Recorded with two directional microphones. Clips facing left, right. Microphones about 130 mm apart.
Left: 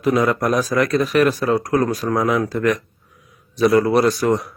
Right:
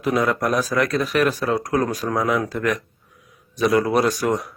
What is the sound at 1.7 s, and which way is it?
Speech, 10° right (ahead or behind).